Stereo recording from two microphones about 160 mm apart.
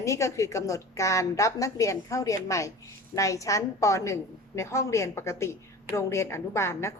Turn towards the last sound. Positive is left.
turn(degrees=15)  # may be behind; listen again after turning